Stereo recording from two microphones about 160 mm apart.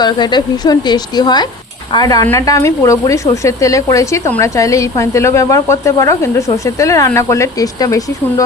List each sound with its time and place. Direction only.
0.0 s speech: 25° left (ahead or behind)